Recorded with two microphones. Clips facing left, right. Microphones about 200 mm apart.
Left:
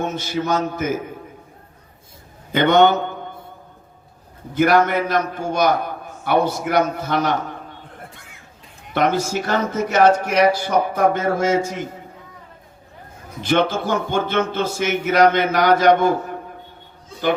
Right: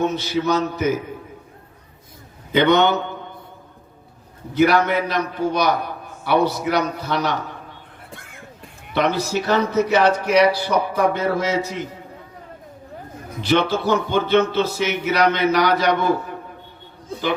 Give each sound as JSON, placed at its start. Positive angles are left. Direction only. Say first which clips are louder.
{"t": 0.0, "sound": "a man's voice", "louder": "right 3 dB", "side_deg": 50}
{"t": 2.5, "sound": "a man's voice", "louder": "left 1 dB", "side_deg": 50}
{"t": 4.5, "sound": "a man's voice", "louder": "left 1 dB", "side_deg": 50}
{"t": 8.9, "sound": "a man's voice", "louder": "left 1 dB", "side_deg": 50}
{"t": 13.4, "sound": "a man's voice", "louder": "even", "side_deg": 50}